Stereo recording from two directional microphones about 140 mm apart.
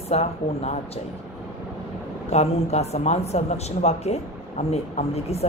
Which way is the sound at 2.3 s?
45° left (ahead or behind).